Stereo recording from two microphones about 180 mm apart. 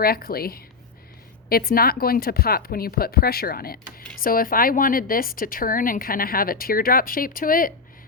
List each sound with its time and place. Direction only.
0.0 s a woman's voice: 55° left (ahead or behind)